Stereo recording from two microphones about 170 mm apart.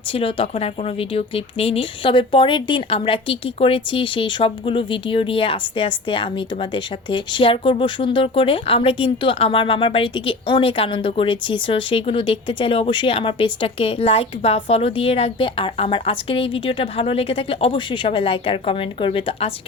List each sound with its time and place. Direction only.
0.1 s speech: 35° left (ahead or behind)